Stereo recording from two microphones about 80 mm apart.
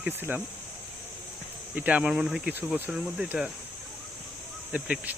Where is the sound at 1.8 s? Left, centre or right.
Centre.